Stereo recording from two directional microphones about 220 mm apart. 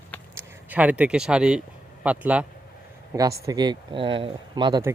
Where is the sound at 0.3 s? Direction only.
5° right (ahead or behind).